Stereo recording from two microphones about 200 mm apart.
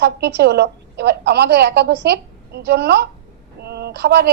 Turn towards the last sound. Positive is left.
turn(degrees=-55)  # may be behind; listen again after turning